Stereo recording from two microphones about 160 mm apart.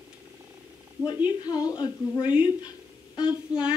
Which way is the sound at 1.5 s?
25° left (ahead or behind).